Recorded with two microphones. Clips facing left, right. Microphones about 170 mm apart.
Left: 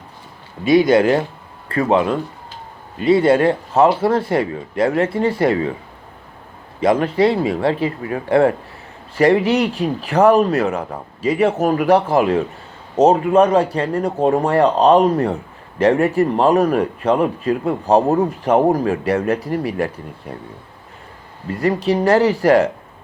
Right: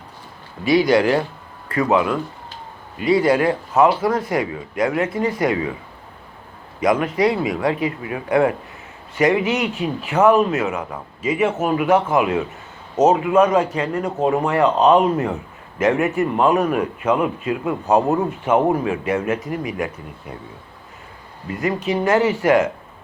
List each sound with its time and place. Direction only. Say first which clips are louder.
0.6 s speech: left 3 dB; 20° left (ahead or behind)
6.7 s speech: left 3 dB; 30° left (ahead or behind)
21.5 s speech: left 4 dB; 35° left (ahead or behind)